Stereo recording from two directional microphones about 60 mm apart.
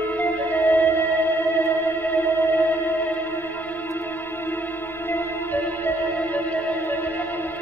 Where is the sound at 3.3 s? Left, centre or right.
Left.